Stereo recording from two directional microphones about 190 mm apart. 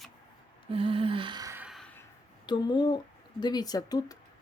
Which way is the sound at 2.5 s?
25° left (ahead or behind).